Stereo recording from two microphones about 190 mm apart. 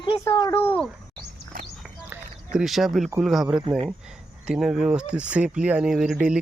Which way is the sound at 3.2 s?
Centre (ahead or behind).